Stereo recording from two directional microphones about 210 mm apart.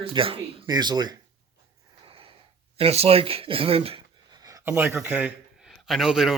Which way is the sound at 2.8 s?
30° right (ahead or behind).